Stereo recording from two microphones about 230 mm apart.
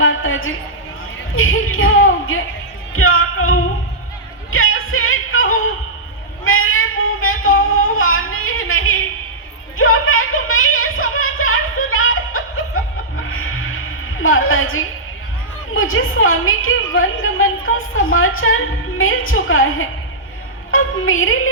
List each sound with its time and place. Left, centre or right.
0.0 s a sound: left
1.4 s speech: left
2.9 s music: left
6.4 s child singing: left
7.6 s music: left
9.7 s a sound: left
20.7 s music: left